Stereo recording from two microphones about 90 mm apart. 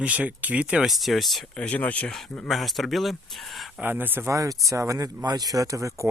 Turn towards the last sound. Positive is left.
turn(degrees=-35)  # may be behind; listen again after turning